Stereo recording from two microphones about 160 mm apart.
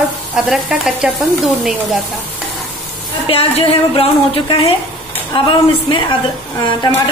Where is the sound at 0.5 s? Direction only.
5° right (ahead or behind).